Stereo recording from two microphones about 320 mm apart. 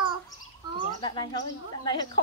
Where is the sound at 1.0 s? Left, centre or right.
Centre.